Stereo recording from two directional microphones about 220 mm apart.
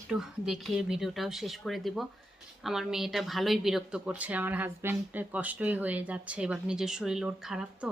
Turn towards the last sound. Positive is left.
turn(degrees=-5)  # may be behind; listen again after turning